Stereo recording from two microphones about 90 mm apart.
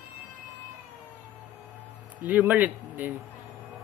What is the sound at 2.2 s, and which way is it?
Speech, 20° right (ahead or behind).